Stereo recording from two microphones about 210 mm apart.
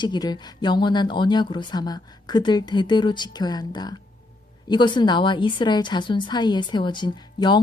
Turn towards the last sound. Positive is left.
turn(degrees=20)  # may be behind; listen again after turning